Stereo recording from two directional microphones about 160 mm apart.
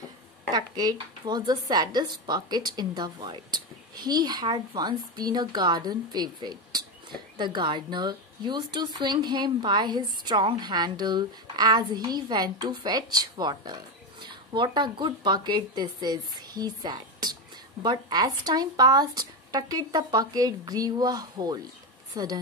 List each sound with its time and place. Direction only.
0.5 s speech: 25° right (ahead or behind)